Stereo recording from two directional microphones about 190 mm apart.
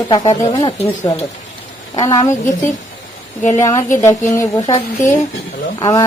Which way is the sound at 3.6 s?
15° left (ahead or behind).